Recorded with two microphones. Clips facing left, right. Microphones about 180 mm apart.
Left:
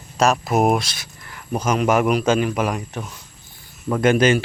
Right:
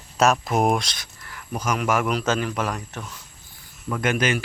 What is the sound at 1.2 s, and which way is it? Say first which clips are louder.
A man's voice: left 5 dB; 25° left (ahead or behind).